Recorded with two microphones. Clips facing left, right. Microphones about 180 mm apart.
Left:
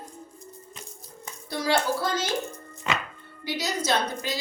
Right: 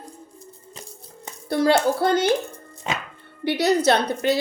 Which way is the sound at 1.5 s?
60° right (ahead or behind).